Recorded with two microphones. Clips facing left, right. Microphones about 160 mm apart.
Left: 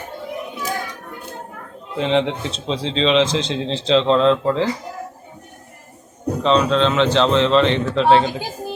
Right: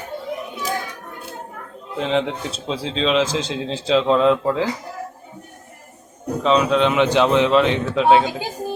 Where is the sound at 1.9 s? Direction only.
5° right (ahead or behind).